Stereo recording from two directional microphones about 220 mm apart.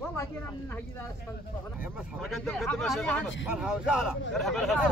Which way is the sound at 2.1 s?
Centre (ahead or behind).